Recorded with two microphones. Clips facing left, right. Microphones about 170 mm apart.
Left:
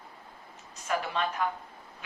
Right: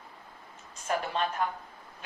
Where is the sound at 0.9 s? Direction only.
40° right (ahead or behind).